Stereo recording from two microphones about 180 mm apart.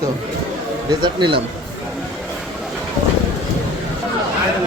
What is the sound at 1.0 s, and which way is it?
Speech, 25° right (ahead or behind).